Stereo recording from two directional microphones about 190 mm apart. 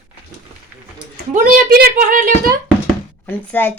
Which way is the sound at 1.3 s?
50° right (ahead or behind).